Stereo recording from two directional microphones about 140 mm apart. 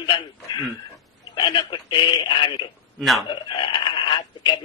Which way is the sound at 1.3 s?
35° left (ahead or behind).